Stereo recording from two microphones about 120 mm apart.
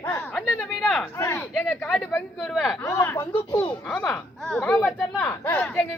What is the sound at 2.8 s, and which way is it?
Speech, 25° left (ahead or behind).